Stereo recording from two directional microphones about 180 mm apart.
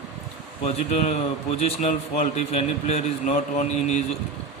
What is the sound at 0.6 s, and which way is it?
A man's voice, 35° left (ahead or behind).